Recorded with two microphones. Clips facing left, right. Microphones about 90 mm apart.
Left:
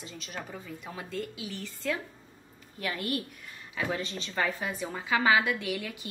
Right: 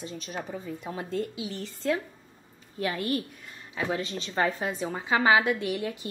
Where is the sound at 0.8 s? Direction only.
35° right (ahead or behind).